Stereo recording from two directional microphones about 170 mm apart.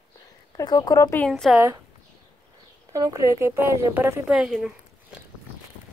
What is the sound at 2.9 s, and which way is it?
Speech, 20° right (ahead or behind).